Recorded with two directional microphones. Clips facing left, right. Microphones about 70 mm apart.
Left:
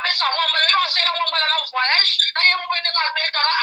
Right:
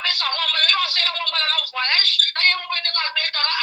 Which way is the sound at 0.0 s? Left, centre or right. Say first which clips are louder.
Left 4 dB; left.